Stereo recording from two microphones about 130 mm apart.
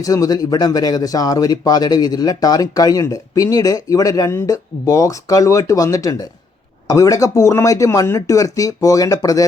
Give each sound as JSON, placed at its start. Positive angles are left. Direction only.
{"t": 0.0, "sound": "speech", "side_deg": 25}